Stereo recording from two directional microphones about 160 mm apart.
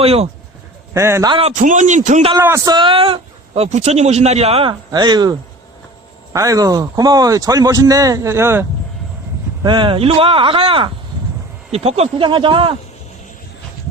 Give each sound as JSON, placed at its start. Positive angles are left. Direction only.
{"t": 0.0, "sound": "a man's voice", "side_deg": -40}
{"t": 0.9, "sound": "a man's voice", "side_deg": -15}
{"t": 1.3, "sound": "a man's voice", "side_deg": -35}
{"t": 1.5, "sound": "a man's voice", "side_deg": -50}
{"t": 2.4, "sound": "a man's voice", "side_deg": -20}
{"t": 4.9, "sound": "speech", "side_deg": -25}
{"t": 9.6, "sound": "a man's voice", "side_deg": -30}